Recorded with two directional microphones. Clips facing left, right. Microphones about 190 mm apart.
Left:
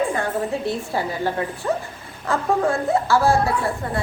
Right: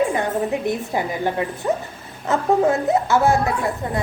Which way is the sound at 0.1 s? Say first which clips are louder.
Right 2 dB; 15° right (ahead or behind).